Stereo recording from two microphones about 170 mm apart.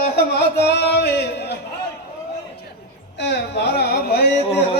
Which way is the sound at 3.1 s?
85° left.